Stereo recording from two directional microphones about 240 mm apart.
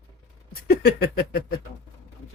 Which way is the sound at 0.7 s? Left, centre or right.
Left.